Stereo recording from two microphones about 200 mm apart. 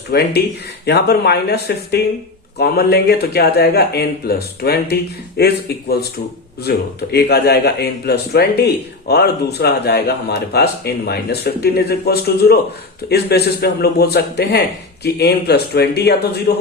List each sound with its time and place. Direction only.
0.1 s speech: 55° left (ahead or behind)
6.7 s speech: 55° left (ahead or behind)